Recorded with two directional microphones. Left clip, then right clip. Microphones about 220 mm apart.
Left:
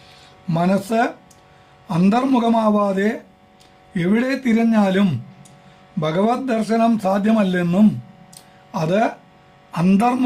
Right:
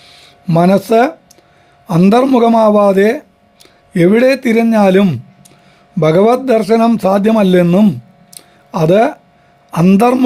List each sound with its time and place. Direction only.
0.0 s music: 35° right (ahead or behind)
1.9 s a man's voice: 40° right (ahead or behind)
8.4 s a sound: 45° right (ahead or behind)
9.7 s a man's voice: 40° right (ahead or behind)